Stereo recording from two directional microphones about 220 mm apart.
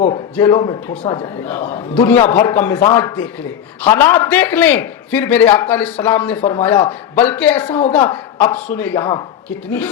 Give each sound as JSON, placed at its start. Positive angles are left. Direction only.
{"t": 0.3, "sound": "a man's voice", "side_deg": 15}